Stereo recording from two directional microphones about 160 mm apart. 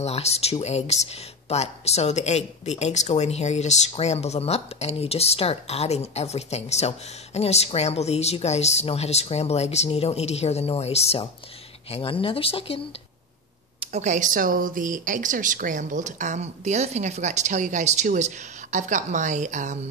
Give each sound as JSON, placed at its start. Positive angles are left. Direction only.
{"t": 0.0, "sound": "a woman's voice", "side_deg": 40}
{"t": 13.7, "sound": "speech", "side_deg": -45}